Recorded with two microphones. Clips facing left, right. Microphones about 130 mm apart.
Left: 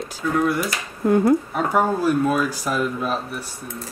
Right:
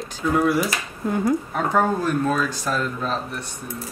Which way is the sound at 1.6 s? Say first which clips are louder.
Left 1 dB; 10° left (ahead or behind).